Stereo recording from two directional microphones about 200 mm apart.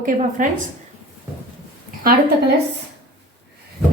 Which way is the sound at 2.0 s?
50° right (ahead or behind).